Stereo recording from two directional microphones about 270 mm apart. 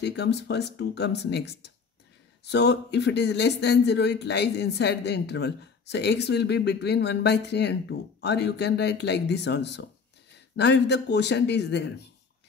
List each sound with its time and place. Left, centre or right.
0.0 s speech: left